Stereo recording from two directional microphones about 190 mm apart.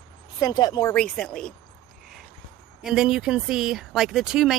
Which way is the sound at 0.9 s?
5° left (ahead or behind).